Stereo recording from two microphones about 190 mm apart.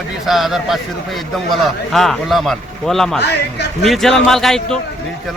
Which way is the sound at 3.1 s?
60° left (ahead or behind).